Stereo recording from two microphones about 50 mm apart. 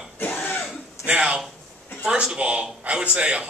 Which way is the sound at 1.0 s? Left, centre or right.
Right.